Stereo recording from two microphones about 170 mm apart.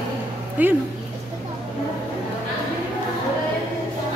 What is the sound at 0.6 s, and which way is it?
Dog, 10° right (ahead or behind).